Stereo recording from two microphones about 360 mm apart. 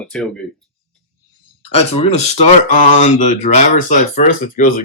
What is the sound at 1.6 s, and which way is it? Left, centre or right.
Speech, centre.